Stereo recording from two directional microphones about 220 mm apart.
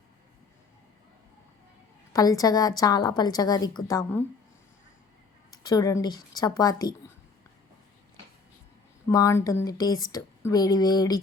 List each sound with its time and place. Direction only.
2.1 s speech: 15° left (ahead or behind)
5.5 s speech: 15° left (ahead or behind)
9.0 s speech: 15° left (ahead or behind)